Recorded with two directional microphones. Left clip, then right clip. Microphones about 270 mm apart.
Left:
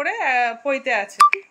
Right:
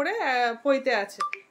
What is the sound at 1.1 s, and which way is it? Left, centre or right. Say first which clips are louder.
Speech: left 17 dB; left.